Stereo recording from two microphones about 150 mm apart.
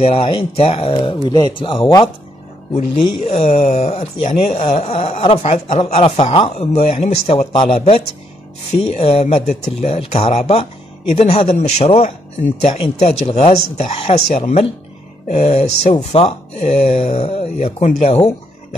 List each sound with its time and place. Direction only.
0.0 s speech: 40° left (ahead or behind)
2.7 s speech: 45° left (ahead or behind)
13.3 s speech: 45° left (ahead or behind)